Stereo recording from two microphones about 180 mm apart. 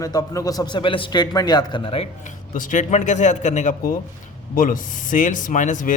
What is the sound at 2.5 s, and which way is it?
A man's voice, 45° left (ahead or behind).